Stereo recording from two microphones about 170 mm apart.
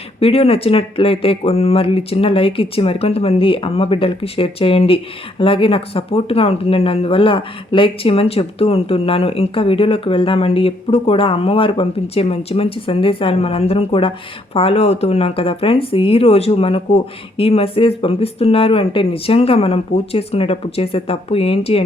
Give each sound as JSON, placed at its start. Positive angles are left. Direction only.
{"t": 0.2, "sound": "speech", "side_deg": 35}